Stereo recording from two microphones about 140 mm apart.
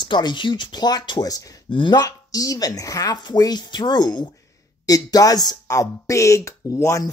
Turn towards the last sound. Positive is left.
turn(degrees=20)  # may be behind; listen again after turning